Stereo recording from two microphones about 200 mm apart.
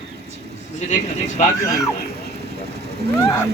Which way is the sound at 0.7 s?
35° left (ahead or behind).